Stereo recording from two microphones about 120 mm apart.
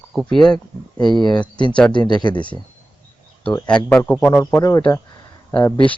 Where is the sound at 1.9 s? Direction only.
40° left (ahead or behind).